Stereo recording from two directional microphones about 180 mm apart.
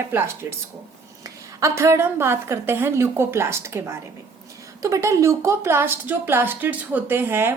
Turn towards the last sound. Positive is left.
turn(degrees=-10)  # may be behind; listen again after turning